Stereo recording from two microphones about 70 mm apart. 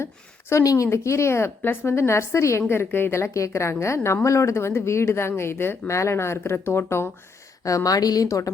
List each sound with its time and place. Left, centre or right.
0.5 s a woman's voice: left
3.2 s a woman's voice: left
7.9 s speech: left